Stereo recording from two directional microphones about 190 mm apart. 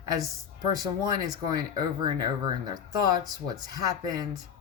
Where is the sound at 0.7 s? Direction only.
20° right (ahead or behind).